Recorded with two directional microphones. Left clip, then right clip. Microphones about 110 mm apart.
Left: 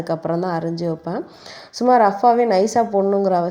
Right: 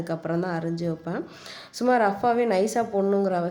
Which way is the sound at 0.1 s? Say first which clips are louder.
Left 7 dB; 35° left (ahead or behind).